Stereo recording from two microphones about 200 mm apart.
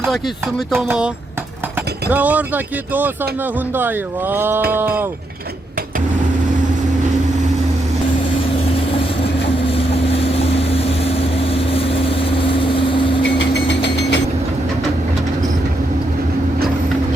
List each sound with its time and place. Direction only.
0.9 s speech: 5° right (ahead or behind)
3.8 s speech: 10° right (ahead or behind)
9.6 s vehicle: 30° left (ahead or behind)
13.2 s vehicle: 60° left (ahead or behind)